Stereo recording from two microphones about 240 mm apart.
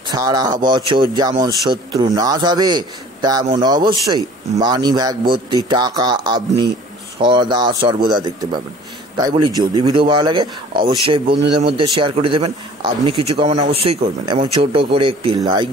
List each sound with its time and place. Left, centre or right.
0.1 s a man's voice: centre